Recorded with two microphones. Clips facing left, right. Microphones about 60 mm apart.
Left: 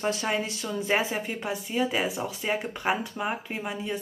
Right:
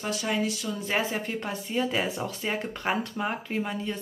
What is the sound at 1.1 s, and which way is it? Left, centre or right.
Speech, centre.